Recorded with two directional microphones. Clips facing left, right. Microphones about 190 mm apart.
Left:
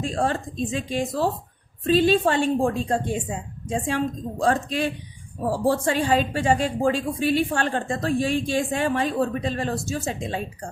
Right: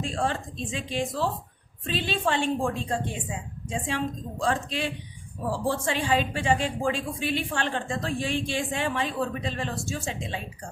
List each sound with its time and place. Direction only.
0.0 s a woman's voice: 40° left (ahead or behind)